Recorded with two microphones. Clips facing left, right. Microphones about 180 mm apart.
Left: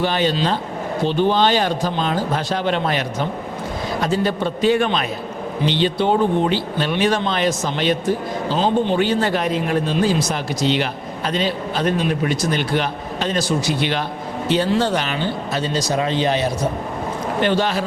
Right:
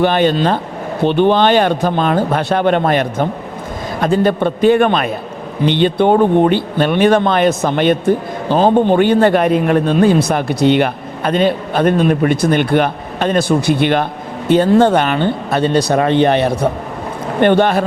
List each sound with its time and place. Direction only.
0.0 s speech: 55° right (ahead or behind)